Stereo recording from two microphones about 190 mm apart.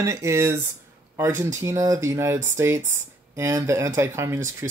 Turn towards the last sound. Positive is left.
turn(degrees=-10)  # may be behind; listen again after turning